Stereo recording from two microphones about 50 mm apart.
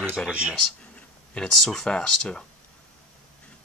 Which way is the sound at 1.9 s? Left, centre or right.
Centre.